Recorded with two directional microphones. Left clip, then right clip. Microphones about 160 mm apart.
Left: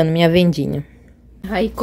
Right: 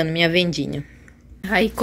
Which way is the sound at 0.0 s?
30° left (ahead or behind).